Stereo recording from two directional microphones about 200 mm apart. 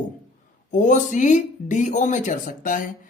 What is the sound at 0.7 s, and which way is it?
Speech, 40° left (ahead or behind).